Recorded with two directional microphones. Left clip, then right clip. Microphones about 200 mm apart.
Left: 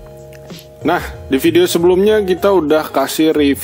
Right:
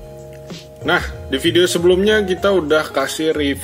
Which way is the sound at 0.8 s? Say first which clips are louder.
Left 1 dB; 55° left (ahead or behind).